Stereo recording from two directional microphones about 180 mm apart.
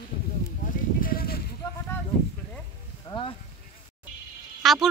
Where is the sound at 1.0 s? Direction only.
55° left (ahead or behind).